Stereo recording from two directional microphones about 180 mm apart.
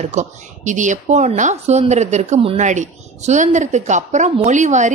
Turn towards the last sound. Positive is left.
turn(degrees=-40)  # may be behind; listen again after turning